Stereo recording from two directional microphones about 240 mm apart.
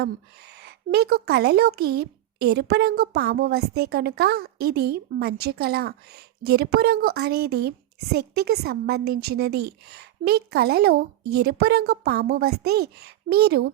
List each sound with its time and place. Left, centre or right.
0.6 s speech: right